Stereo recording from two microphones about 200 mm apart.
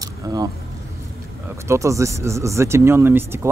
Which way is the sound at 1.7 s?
15° right (ahead or behind).